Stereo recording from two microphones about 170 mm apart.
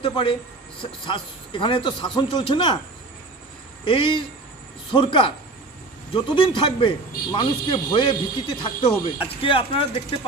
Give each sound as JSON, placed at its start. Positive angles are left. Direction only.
{"t": 0.0, "sound": "speech", "side_deg": 30}
{"t": 3.8, "sound": "speech", "side_deg": 30}